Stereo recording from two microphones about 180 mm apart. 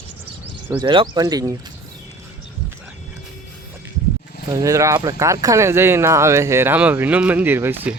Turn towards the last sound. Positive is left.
turn(degrees=-10)  # may be behind; listen again after turning